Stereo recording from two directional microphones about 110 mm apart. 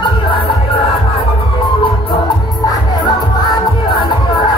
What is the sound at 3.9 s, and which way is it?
Music, 45° left (ahead or behind).